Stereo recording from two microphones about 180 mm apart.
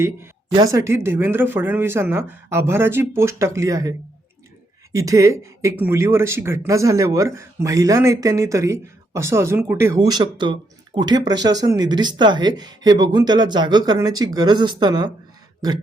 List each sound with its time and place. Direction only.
0.0 s speech: 15° right (ahead or behind)